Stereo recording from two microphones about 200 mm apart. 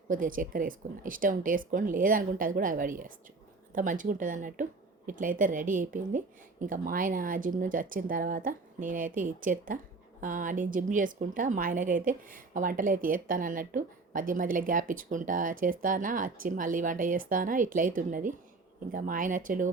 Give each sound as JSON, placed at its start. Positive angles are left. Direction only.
{"t": 0.1, "sound": "a woman's voice", "side_deg": -45}